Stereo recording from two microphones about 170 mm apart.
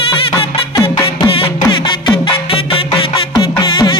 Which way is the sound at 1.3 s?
30° left (ahead or behind).